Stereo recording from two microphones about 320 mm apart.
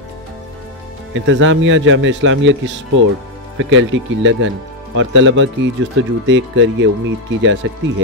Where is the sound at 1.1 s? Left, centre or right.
Right.